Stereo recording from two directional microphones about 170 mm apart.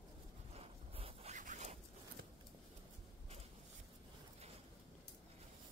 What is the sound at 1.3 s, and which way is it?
Zipper, 45° right (ahead or behind).